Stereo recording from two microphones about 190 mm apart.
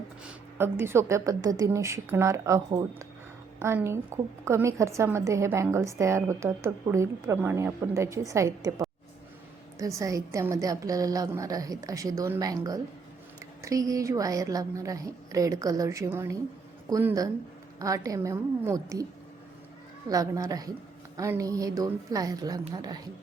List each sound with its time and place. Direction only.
0.3 s a woman's voice: 10° right (ahead or behind)
20.1 s a woman's voice: 20° right (ahead or behind)